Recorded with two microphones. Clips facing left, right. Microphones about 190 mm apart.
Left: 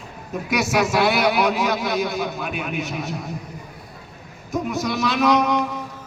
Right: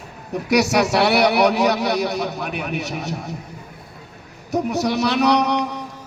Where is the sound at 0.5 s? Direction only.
75° right (ahead or behind).